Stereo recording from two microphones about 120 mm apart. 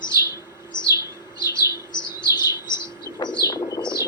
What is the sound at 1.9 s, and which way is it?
Chirp, 35° left (ahead or behind).